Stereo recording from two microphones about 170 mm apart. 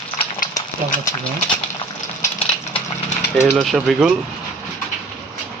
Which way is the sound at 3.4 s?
Centre (ahead or behind).